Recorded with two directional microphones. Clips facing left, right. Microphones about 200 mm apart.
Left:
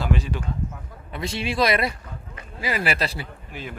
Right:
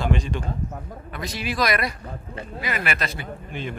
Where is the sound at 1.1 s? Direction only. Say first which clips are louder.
Left 2 dB; 25° left (ahead or behind).